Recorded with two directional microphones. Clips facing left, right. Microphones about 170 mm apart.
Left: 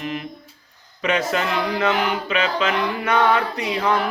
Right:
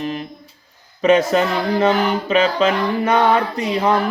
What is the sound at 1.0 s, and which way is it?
Mantra, 35° right (ahead or behind).